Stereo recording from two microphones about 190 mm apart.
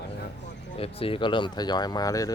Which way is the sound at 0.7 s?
30° left (ahead or behind).